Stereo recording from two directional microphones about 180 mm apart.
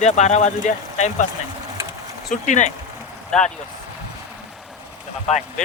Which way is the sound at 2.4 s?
40° left (ahead or behind).